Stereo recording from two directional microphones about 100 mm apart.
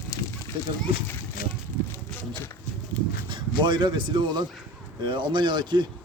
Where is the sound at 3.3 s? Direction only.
50° right (ahead or behind).